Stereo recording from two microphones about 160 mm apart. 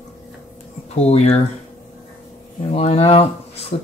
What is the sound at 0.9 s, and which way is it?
Speech, 40° left (ahead or behind).